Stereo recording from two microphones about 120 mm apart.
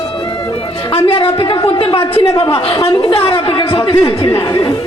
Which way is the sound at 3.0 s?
50° left (ahead or behind).